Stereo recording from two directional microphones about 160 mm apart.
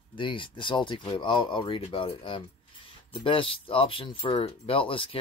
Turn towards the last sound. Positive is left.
turn(degrees=35)  # may be behind; listen again after turning